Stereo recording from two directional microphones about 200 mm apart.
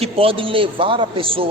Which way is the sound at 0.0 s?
30° right (ahead or behind).